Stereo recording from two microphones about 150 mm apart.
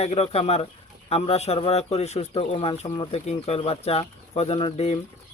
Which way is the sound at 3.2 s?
45° left (ahead or behind).